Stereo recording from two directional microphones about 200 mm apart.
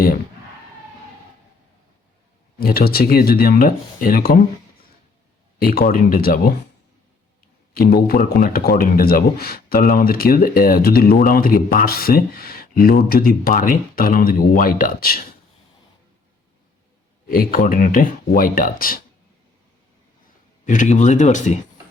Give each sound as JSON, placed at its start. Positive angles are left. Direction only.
{"t": 2.6, "sound": "speech", "side_deg": 50}
{"t": 5.5, "sound": "speech", "side_deg": 50}
{"t": 7.7, "sound": "speech", "side_deg": 50}
{"t": 17.2, "sound": "speech", "side_deg": 45}
{"t": 20.7, "sound": "speech", "side_deg": 40}